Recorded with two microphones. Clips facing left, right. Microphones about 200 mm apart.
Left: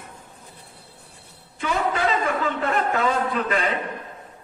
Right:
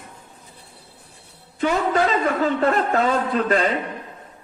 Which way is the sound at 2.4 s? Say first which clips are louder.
Right 4 dB; 35° right (ahead or behind).